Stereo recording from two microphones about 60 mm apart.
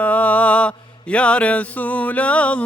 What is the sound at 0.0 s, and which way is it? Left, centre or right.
Mantra, left.